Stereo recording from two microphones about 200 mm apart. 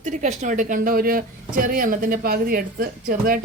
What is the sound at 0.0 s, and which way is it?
Speech, 40° right (ahead or behind).